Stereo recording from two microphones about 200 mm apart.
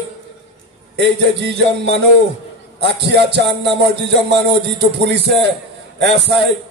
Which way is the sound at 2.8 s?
55° right (ahead or behind).